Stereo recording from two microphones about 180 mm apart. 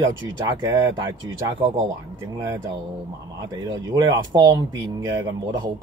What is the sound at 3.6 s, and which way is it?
Speech, 20° right (ahead or behind).